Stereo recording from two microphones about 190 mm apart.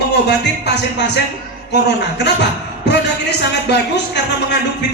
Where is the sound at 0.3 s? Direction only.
65° left (ahead or behind).